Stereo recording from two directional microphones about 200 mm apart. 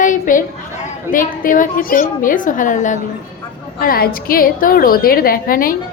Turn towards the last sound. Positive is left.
turn(degrees=45)  # may be behind; listen again after turning